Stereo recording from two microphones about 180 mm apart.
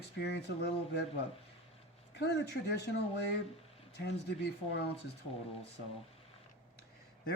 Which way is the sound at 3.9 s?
70° left (ahead or behind).